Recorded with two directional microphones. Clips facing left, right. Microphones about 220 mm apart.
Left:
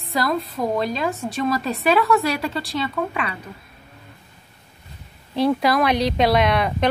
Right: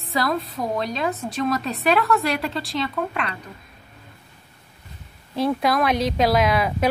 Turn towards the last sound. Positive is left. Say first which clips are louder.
# left 1 dB
turn(degrees=-5)  # may be behind; listen again after turning